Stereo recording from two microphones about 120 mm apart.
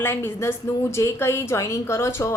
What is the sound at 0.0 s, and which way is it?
A woman's voice, 20° left (ahead or behind).